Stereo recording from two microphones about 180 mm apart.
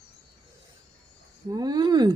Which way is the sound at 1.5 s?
20° right (ahead or behind).